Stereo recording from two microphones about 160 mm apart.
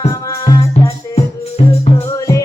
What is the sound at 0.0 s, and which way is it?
Music, 20° left (ahead or behind).